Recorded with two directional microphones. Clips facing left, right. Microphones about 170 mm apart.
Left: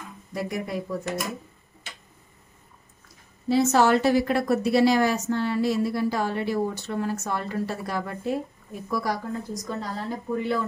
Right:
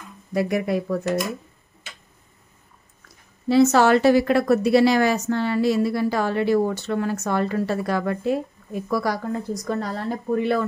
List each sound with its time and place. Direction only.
0.3 s speech: 70° right (ahead or behind)
3.4 s a woman's voice: 75° right (ahead or behind)
9.7 s speech: 65° right (ahead or behind)